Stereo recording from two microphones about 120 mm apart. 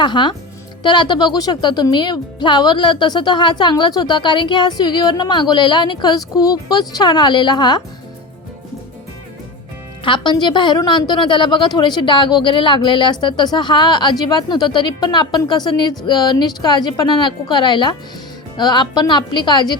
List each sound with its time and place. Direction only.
0.0 s speech: 40° left (ahead or behind)
10.0 s speech: 40° left (ahead or behind)